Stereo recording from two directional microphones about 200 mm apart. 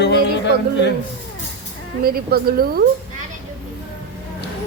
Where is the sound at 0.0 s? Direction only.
60° left (ahead or behind).